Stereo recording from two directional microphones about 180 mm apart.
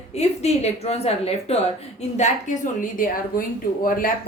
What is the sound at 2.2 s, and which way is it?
A woman's voice, 45° left (ahead or behind).